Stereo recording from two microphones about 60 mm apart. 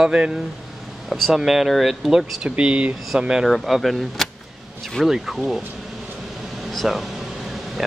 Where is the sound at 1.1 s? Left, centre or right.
Centre.